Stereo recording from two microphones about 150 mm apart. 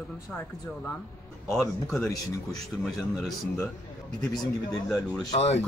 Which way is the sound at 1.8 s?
Centre (ahead or behind).